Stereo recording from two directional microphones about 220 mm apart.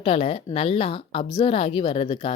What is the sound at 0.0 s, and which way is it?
Speech, 25° left (ahead or behind).